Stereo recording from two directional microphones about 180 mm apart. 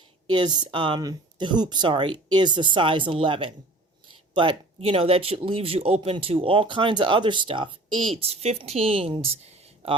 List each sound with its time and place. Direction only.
0.3 s speech: 25° right (ahead or behind)